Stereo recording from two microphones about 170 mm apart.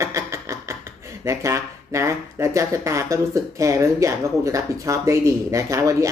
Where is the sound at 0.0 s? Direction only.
15° right (ahead or behind).